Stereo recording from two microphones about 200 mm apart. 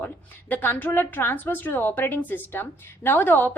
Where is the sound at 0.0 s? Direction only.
10° left (ahead or behind).